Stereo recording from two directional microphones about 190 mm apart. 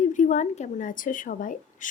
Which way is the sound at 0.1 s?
40° left (ahead or behind).